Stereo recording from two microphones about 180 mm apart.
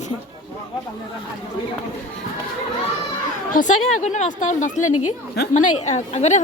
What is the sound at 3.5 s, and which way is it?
A woman's voice, 45° left (ahead or behind).